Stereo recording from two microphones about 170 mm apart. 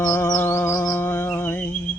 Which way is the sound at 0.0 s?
15° left (ahead or behind).